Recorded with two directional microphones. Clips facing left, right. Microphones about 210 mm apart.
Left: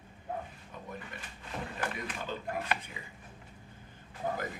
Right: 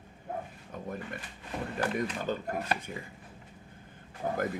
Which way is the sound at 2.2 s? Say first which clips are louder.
Right 3 dB; 45° right (ahead or behind).